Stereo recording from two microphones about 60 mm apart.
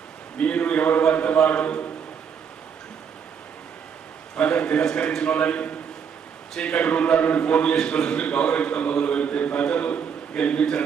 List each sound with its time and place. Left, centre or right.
0.3 s a sound: centre
1.5 s a man's voice: left
4.4 s a man's voice: centre